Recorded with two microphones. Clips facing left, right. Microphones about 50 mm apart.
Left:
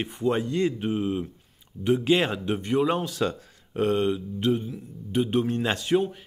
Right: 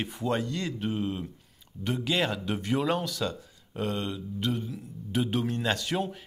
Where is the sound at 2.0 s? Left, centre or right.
Left.